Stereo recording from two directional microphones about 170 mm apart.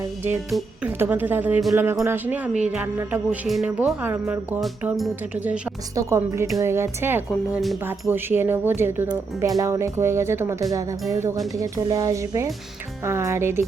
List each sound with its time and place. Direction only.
0.9 s speech: 10° right (ahead or behind)
4.6 s speech: centre (ahead or behind)
6.0 s speech: 15° right (ahead or behind)
7.5 s speech: centre (ahead or behind)
8.1 s speech: 10° right (ahead or behind)